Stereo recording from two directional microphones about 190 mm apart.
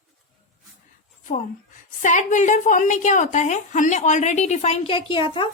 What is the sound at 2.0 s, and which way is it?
A woman's voice, 40° left (ahead or behind).